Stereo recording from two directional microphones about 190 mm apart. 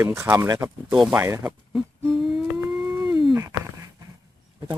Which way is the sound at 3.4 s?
15° right (ahead or behind).